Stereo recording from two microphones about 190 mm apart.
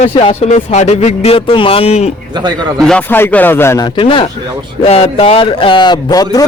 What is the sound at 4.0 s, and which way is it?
A man's voice, 25° left (ahead or behind).